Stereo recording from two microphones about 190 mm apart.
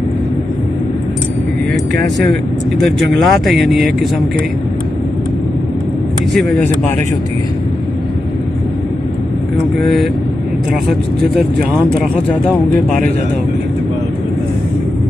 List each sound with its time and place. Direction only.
3.0 s speech: centre (ahead or behind)
11.7 s speech: centre (ahead or behind)